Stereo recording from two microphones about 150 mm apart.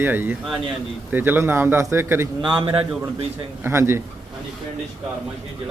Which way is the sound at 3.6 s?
15° right (ahead or behind).